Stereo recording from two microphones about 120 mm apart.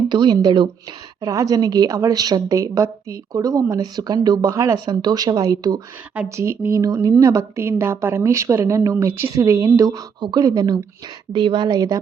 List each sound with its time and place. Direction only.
0.1 s a woman's voice: 40° right (ahead or behind)
1.2 s a woman's voice: 30° right (ahead or behind)
11.3 s a woman's voice: 40° right (ahead or behind)